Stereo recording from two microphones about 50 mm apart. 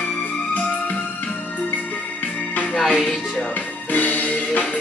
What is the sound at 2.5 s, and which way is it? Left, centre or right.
Music, left.